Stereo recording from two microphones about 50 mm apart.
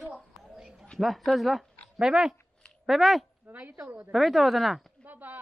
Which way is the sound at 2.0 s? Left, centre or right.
Centre.